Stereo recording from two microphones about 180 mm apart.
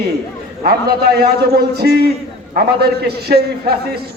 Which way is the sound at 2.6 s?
60° right (ahead or behind).